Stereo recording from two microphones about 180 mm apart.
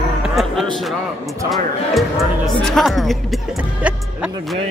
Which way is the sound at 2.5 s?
Centre (ahead or behind).